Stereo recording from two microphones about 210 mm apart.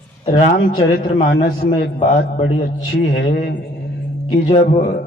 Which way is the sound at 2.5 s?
25° left (ahead or behind).